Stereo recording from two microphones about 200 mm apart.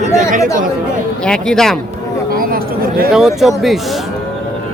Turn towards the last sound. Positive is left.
turn(degrees=0)  # may be behind; listen again after turning